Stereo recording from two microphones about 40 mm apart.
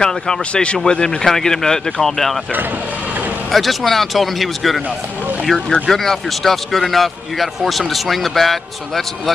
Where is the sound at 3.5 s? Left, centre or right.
Centre.